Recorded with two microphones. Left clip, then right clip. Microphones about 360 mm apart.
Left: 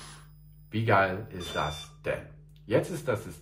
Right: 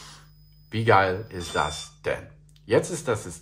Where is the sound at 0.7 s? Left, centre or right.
Centre.